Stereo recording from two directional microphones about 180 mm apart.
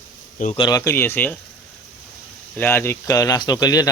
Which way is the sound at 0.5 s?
25° left (ahead or behind).